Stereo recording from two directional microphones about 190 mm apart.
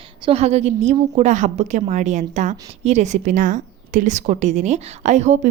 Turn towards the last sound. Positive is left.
turn(degrees=-40)  # may be behind; listen again after turning